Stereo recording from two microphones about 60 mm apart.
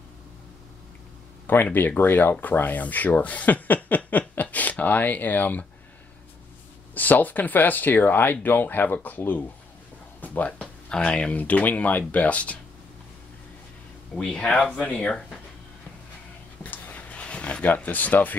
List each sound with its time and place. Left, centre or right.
1.5 s speech: left
6.9 s speech: left
10.2 s music: left
11.0 s speech: left
14.1 s speech: centre
16.6 s a sound: left